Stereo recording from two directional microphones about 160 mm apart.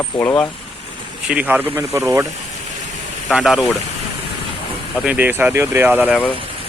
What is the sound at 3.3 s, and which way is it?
Speech, 5° right (ahead or behind).